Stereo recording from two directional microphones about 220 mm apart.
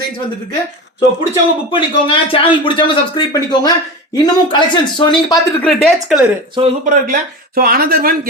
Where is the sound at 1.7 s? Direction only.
25° left (ahead or behind).